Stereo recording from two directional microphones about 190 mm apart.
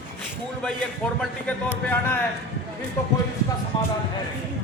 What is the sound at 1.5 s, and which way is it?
Speech, 10° left (ahead or behind).